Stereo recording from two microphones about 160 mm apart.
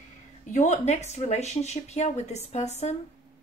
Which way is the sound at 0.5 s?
45° left (ahead or behind).